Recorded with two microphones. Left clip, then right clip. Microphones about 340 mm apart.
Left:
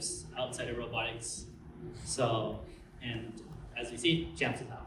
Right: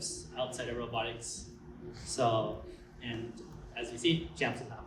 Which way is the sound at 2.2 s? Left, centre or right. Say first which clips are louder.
Right 2 dB; right.